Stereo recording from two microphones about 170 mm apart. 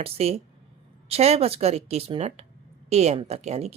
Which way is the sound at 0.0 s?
35° right (ahead or behind).